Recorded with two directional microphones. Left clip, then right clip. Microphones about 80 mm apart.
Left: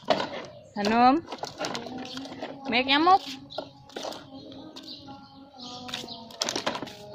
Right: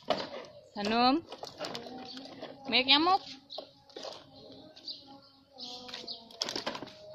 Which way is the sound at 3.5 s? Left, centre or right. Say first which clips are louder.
Left 7 dB; left.